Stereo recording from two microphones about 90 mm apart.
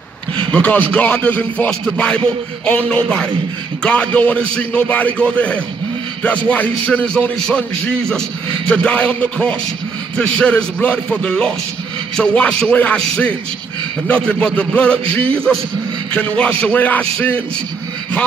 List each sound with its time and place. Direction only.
0.5 s a man's voice: 15° left (ahead or behind)
8.6 s a man's voice: 10° left (ahead or behind)